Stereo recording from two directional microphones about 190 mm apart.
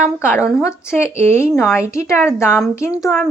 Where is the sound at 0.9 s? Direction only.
15° left (ahead or behind).